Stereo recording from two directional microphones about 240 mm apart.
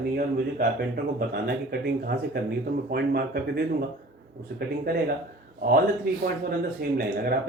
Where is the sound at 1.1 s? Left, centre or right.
Right.